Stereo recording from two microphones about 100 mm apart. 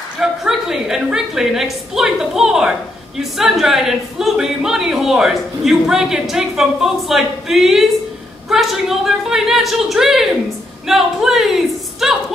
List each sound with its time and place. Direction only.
0.2 s speech: 5° right (ahead or behind)